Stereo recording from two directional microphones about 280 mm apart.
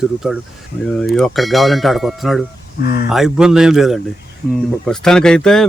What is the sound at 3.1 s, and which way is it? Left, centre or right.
Speech, centre.